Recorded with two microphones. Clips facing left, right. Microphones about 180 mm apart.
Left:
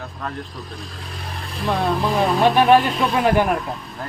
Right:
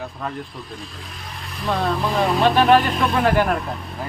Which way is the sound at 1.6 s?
10° left (ahead or behind).